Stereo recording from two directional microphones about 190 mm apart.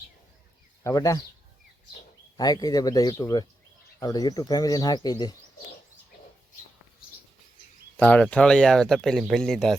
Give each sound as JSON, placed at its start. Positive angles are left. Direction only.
{"t": 0.9, "sound": "speech", "side_deg": 20}
{"t": 2.4, "sound": "speech", "side_deg": 20}
{"t": 7.9, "sound": "speech", "side_deg": 10}